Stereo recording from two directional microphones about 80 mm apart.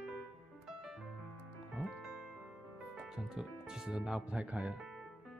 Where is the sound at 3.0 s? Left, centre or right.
Centre.